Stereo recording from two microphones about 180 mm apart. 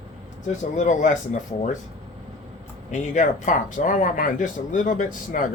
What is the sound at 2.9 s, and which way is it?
Speech, 45° left (ahead or behind).